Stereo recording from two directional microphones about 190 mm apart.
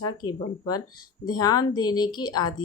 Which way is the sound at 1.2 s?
20° left (ahead or behind).